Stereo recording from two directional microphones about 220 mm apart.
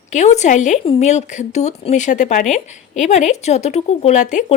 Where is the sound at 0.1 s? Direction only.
30° left (ahead or behind).